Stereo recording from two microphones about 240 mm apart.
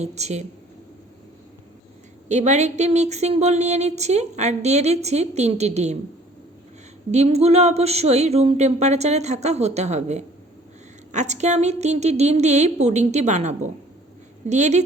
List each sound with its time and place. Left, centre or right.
0.0 s speech: right
2.3 s speech: right
7.1 s speech: right